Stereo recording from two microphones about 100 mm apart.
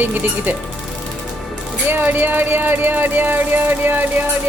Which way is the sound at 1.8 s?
20° right (ahead or behind).